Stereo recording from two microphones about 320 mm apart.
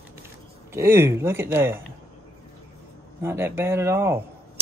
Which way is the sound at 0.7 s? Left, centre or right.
Centre.